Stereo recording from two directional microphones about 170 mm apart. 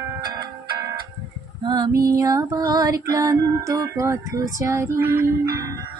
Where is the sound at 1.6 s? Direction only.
20° right (ahead or behind).